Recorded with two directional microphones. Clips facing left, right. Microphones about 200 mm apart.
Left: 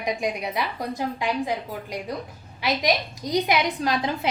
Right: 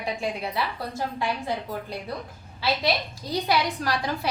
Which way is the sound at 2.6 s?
15° left (ahead or behind).